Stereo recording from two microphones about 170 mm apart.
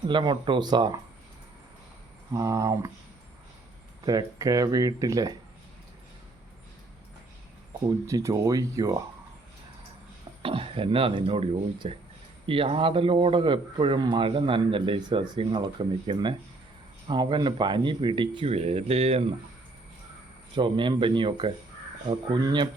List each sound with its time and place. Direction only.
0.1 s speech: 30° right (ahead or behind)
2.3 s speech: 20° right (ahead or behind)
4.0 s speech: 20° right (ahead or behind)
8.0 s speech: 20° right (ahead or behind)
10.4 s speech: 30° right (ahead or behind)
20.6 s speech: 30° right (ahead or behind)